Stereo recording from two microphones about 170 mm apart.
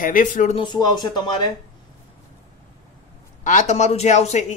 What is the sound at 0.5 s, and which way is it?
Speech, 30° left (ahead or behind).